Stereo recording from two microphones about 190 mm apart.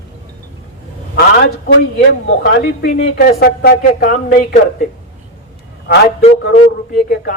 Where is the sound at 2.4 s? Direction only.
55° left (ahead or behind).